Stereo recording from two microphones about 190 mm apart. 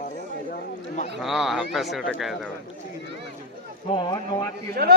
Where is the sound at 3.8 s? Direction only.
25° left (ahead or behind).